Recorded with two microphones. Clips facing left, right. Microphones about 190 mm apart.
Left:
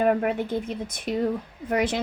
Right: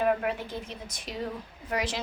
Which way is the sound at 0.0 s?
55° left (ahead or behind).